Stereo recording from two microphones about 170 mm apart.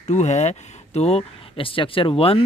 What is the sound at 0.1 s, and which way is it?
Speech, 40° left (ahead or behind).